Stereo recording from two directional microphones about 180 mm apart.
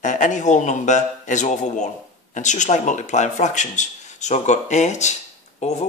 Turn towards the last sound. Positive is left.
turn(degrees=40)  # may be behind; listen again after turning